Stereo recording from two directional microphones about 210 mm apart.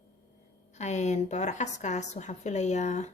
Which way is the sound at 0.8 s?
35° left (ahead or behind).